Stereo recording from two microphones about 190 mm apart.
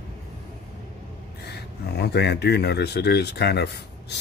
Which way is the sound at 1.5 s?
60° left (ahead or behind).